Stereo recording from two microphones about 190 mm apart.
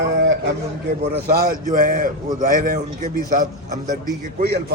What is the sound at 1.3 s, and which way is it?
A man's voice, 50° right (ahead or behind).